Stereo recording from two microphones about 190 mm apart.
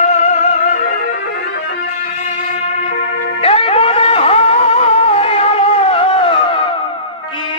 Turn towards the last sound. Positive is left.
turn(degrees=30)  # may be behind; listen again after turning